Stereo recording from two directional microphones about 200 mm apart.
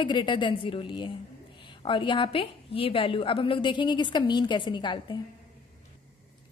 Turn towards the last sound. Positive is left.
turn(degrees=25)  # may be behind; listen again after turning